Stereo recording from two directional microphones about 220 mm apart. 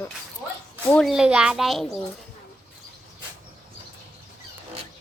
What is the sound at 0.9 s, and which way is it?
Speech, centre (ahead or behind).